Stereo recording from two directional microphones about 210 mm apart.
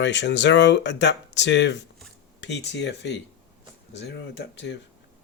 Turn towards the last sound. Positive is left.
turn(degrees=55)  # may be behind; listen again after turning